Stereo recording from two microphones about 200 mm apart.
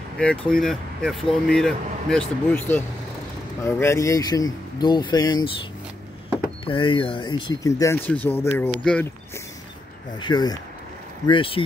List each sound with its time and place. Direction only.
0.2 s speech: 5° left (ahead or behind)
6.6 s speech: 25° left (ahead or behind)
10.1 s speech: 20° left (ahead or behind)